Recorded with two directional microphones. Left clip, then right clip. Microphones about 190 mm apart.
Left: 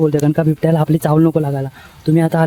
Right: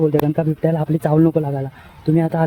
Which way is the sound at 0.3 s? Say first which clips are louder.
Left 4 dB; 35° left (ahead or behind).